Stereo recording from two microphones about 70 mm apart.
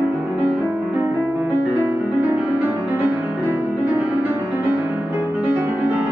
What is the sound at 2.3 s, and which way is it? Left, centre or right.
Music, right.